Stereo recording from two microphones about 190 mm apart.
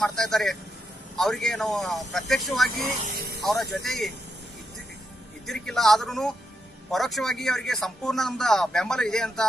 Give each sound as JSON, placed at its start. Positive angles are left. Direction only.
{"t": 0.0, "sound": "speech", "side_deg": 5}
{"t": 3.0, "sound": "speech", "side_deg": -50}
{"t": 3.7, "sound": "speech", "side_deg": 0}
{"t": 5.5, "sound": "speech", "side_deg": 0}